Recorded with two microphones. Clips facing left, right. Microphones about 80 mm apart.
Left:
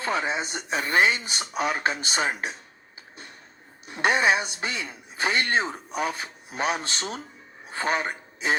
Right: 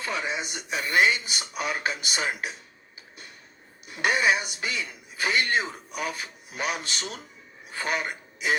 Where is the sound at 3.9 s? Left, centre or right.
Left.